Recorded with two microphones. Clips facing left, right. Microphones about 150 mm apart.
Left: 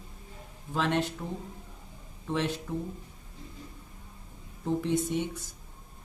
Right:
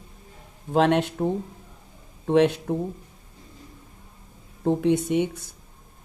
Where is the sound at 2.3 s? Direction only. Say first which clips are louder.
Right 11 dB; 65° right (ahead or behind).